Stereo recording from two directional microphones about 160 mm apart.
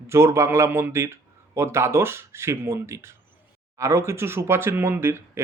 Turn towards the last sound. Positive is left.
turn(degrees=-15)  # may be behind; listen again after turning